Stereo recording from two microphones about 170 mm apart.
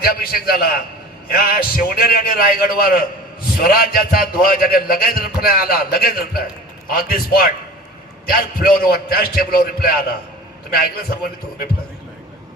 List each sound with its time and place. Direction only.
0.0 s a man's voice: 60° left (ahead or behind)